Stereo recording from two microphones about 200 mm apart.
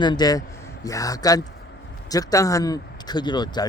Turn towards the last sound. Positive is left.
turn(degrees=20)  # may be behind; listen again after turning